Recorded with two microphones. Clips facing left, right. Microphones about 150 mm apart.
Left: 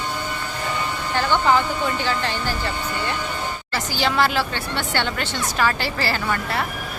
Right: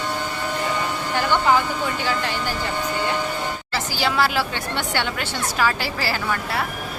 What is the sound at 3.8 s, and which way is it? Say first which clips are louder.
Speech: left 1 dB; 5° right (ahead or behind).